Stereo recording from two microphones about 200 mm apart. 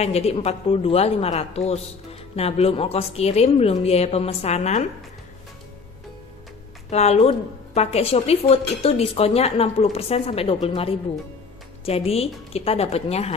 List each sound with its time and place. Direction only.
0.0 s a woman's voice: 30° left (ahead or behind)
6.9 s a woman's voice: 30° left (ahead or behind)